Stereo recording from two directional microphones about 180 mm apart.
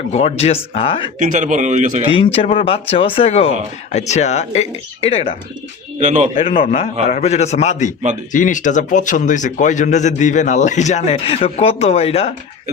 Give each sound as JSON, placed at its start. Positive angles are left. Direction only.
{"t": 0.1, "sound": "a man's voice", "side_deg": 35}
{"t": 1.2, "sound": "speech", "side_deg": -45}
{"t": 2.1, "sound": "a man's voice", "side_deg": 30}
{"t": 6.0, "sound": "speech", "side_deg": -40}
{"t": 6.4, "sound": "a man's voice", "side_deg": 30}